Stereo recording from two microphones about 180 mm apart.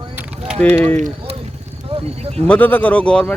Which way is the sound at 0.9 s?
40° right (ahead or behind).